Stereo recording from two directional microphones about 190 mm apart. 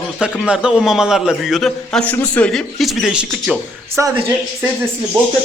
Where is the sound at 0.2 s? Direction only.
5° right (ahead or behind).